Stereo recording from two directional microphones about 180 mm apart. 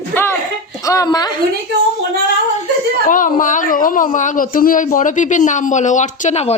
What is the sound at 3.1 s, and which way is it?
Speech, 50° left (ahead or behind).